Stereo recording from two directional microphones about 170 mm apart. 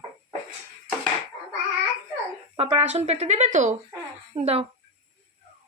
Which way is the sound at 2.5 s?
35° right (ahead or behind).